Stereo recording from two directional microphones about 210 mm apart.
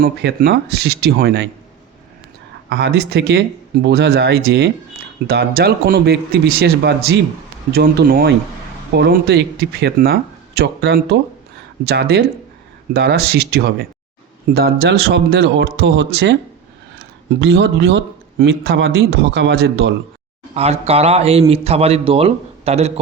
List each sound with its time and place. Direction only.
0.0 s speech: 50° right (ahead or behind)
2.6 s speech: 50° right (ahead or behind)
17.4 s speech: 55° right (ahead or behind)
20.5 s a man's voice: 30° right (ahead or behind)